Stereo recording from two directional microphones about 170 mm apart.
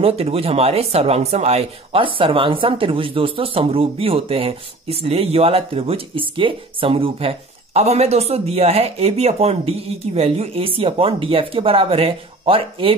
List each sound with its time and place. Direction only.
0.0 s speech: 35° right (ahead or behind)